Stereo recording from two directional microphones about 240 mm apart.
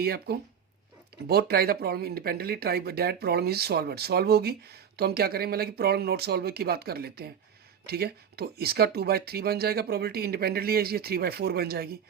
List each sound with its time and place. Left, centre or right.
0.0 s speech: right